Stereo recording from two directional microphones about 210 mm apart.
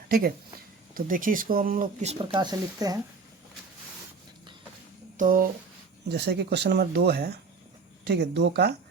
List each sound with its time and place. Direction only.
0.1 s speech: 45° right (ahead or behind); by 3.0 s 15° right (ahead or behind)
5.1 s speech: 40° right (ahead or behind)
6.1 s speech: 50° right (ahead or behind)